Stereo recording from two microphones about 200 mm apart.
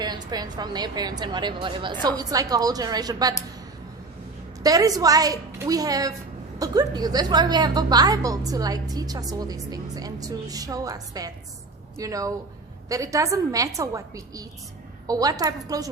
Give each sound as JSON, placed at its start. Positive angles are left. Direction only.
{"t": 0.0, "sound": "a woman's voice", "side_deg": -20}
{"t": 4.6, "sound": "a woman's voice", "side_deg": -20}